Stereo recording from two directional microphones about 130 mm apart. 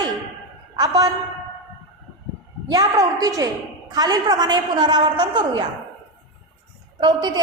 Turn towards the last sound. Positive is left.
turn(degrees=-35)  # may be behind; listen again after turning